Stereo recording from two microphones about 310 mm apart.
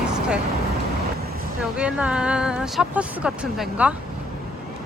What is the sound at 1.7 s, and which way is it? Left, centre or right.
Speech, centre.